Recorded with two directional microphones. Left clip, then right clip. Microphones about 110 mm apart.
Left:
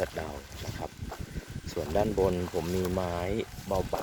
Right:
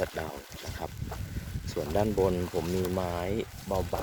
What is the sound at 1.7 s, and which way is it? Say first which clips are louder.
Speech: even; 15° right (ahead or behind).